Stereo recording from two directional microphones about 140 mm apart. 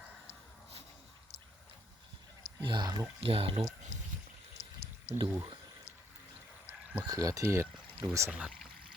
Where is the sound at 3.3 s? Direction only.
45° right (ahead or behind).